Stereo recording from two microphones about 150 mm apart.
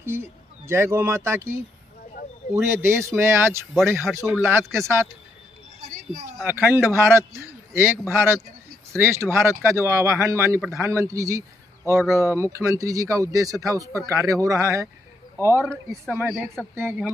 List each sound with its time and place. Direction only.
0.0 s speech: 15° right (ahead or behind)
6.4 s a man's voice: 15° right (ahead or behind)
15.6 s speech: 5° left (ahead or behind)
16.2 s speech: 15° right (ahead or behind)